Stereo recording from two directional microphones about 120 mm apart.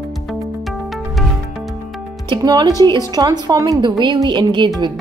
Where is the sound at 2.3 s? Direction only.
35° right (ahead or behind).